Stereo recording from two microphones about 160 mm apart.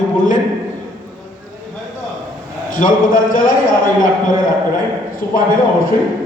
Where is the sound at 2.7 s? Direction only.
60° left (ahead or behind).